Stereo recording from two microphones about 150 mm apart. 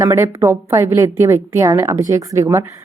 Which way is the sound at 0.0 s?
20° right (ahead or behind).